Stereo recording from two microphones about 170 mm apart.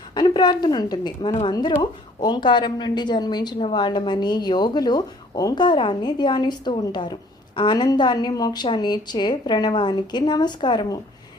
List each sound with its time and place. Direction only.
0.1 s a woman's voice: 25° left (ahead or behind)